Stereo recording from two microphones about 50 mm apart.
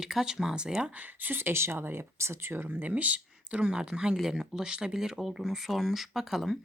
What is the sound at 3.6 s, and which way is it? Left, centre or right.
Speech, centre.